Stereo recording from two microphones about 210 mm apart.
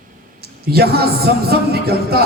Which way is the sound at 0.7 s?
50° right (ahead or behind).